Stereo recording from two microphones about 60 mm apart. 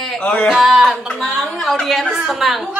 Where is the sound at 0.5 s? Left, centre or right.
Centre.